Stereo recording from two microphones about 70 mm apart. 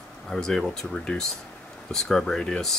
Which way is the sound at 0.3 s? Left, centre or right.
Centre.